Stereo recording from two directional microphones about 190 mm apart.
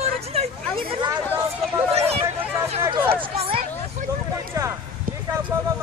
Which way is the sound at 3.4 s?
30° right (ahead or behind).